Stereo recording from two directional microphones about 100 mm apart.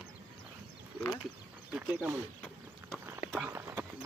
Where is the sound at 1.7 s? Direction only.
15° right (ahead or behind).